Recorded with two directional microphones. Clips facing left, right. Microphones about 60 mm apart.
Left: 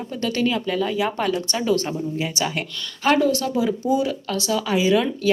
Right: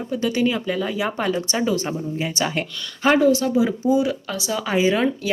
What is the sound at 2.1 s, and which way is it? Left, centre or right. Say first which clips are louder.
A woman's voice: right 1 dB; right.